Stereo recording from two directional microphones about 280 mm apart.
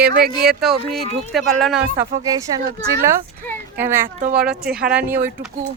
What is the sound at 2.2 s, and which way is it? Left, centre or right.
Speech, centre.